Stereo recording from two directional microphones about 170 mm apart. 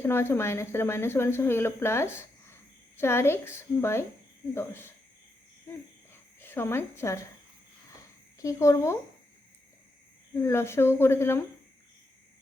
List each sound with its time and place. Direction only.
0.0 s speech: 15° left (ahead or behind)
5.7 s hoot: 15° left (ahead or behind)
6.4 s a woman's voice: 15° left (ahead or behind)
8.4 s speech: 20° left (ahead or behind)
10.3 s speech: 15° left (ahead or behind)